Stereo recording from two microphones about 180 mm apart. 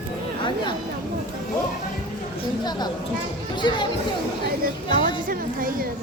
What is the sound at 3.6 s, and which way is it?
Speech, 25° left (ahead or behind).